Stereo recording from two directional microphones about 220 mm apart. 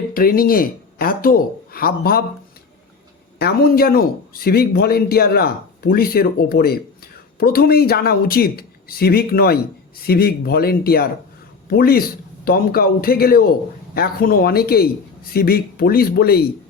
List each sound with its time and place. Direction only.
0.1 s speech: 40° left (ahead or behind)
3.3 s a man's voice: 45° left (ahead or behind)